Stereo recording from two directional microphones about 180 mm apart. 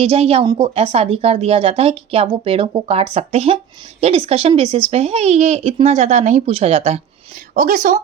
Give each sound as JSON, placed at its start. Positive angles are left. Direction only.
{"t": 0.0, "sound": "a woman's voice", "side_deg": -35}
{"t": 7.5, "sound": "speech", "side_deg": -45}